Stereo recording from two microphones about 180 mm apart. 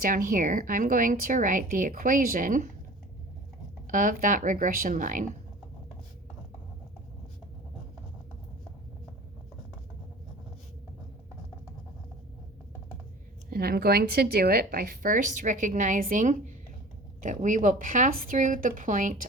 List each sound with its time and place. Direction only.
0.0 s speech: 50° right (ahead or behind)
3.8 s speech: 50° right (ahead or behind)
13.5 s speech: 55° right (ahead or behind)